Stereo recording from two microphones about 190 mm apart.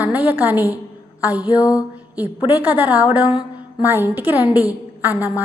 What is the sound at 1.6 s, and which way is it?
Speech, 20° left (ahead or behind).